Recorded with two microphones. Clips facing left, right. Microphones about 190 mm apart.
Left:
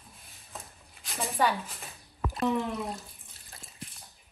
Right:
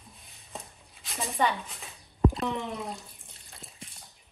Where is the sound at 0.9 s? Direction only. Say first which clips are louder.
Left 1 dB; centre (ahead or behind).